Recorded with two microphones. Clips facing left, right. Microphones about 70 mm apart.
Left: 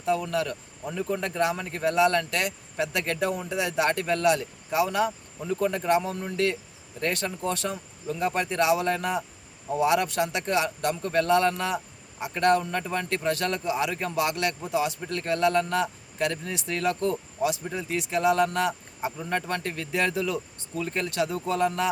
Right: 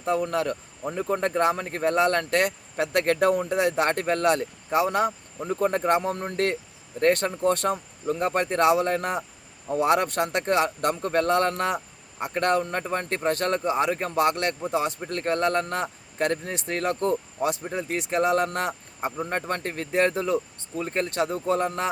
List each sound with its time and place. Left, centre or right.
0.3 s speech: right